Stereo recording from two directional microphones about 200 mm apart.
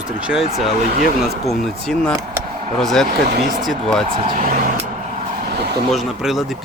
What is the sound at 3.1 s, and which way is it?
Speech, 45° right (ahead or behind).